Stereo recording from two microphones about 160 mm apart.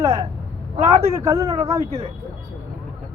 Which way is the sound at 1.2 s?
20° right (ahead or behind).